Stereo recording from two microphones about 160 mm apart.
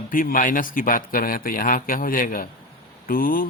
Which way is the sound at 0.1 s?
60° left (ahead or behind).